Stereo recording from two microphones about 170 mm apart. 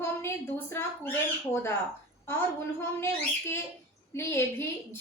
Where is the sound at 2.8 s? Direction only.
15° left (ahead or behind).